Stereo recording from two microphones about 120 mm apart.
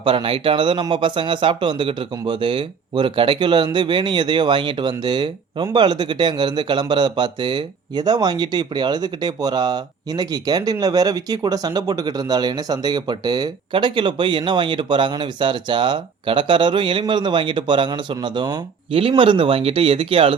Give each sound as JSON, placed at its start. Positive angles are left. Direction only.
{"t": 0.0, "sound": "speech", "side_deg": -45}
{"t": 18.9, "sound": "speech", "side_deg": -50}